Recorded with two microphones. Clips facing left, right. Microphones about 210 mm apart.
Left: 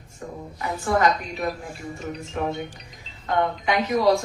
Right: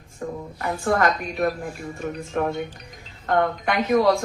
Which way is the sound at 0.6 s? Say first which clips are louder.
Even; 55° right (ahead or behind).